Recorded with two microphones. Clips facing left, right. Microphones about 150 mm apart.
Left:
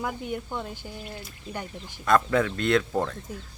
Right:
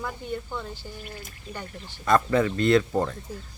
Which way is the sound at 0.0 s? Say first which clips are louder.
Left 1 dB; 10° left (ahead or behind).